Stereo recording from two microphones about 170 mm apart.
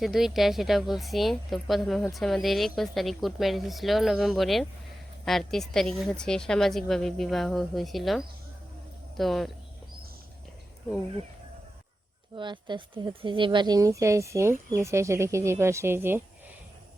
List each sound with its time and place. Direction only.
0.0 s a woman's voice: centre (ahead or behind)
12.4 s speech: 25° right (ahead or behind)